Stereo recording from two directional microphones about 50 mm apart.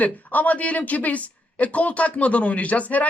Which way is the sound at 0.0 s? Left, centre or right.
Left.